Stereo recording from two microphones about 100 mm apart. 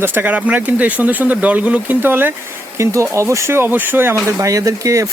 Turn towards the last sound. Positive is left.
turn(degrees=-30)  # may be behind; listen again after turning